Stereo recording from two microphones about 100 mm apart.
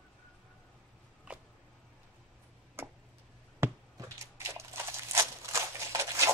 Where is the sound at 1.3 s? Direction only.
10° right (ahead or behind).